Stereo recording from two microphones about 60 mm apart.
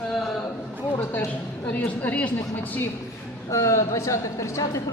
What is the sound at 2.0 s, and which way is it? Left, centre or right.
Speech, left.